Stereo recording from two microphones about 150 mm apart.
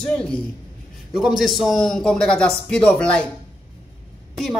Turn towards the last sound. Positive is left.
turn(degrees=0)  # may be behind; listen again after turning